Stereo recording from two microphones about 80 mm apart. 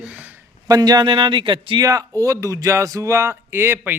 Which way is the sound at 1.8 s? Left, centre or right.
Right.